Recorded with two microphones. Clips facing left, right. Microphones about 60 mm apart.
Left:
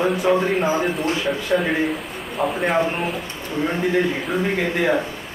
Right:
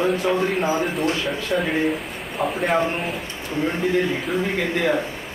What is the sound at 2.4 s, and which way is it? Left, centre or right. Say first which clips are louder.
Speech: left 2 dB; centre.